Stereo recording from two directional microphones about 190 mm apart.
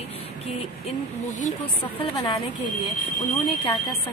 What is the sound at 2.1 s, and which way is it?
Speech, 20° left (ahead or behind).